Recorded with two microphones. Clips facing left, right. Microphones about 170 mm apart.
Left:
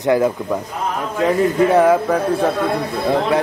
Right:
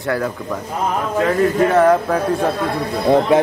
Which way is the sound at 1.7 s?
5° left (ahead or behind).